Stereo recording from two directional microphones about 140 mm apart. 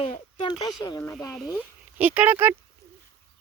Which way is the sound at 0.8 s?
30° left (ahead or behind).